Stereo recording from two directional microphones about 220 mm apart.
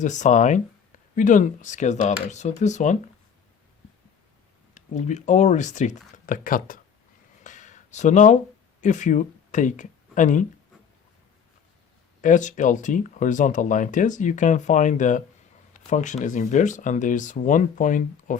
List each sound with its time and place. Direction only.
0.0 s speech: 35° left (ahead or behind)
4.7 s speech: 35° left (ahead or behind)
7.4 s a sound: 35° left (ahead or behind)
8.8 s speech: 35° left (ahead or behind)
12.2 s speech: 35° left (ahead or behind)